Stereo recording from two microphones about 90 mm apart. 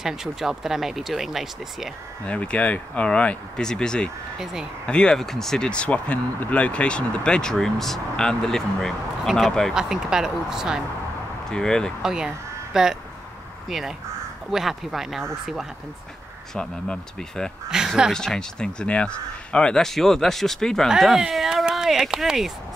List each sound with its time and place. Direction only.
0.0 s speech: 5° right (ahead or behind)
2.2 s speech: 15° left (ahead or behind); by 10.8 s 5° right (ahead or behind)
11.5 s speech: 5° left (ahead or behind)
12.0 s speech: 5° right (ahead or behind)
16.5 s speech: 10° left (ahead or behind)
17.6 s speech: 5° right (ahead or behind)
18.1 s speech: 5° left (ahead or behind)